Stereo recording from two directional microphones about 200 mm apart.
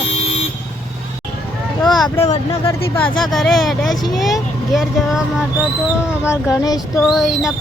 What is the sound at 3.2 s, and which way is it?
Speech, centre (ahead or behind).